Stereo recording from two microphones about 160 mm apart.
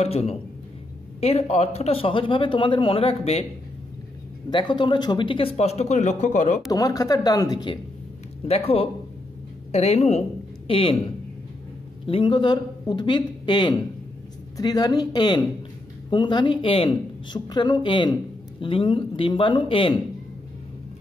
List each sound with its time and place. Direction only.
0.0 s speech: 40° left (ahead or behind)
4.5 s speech: 30° left (ahead or behind); by 6.6 s 50° left (ahead or behind)
6.7 s speech: 20° left (ahead or behind)
8.5 s speech: 40° left (ahead or behind)
12.1 s speech: 30° left (ahead or behind)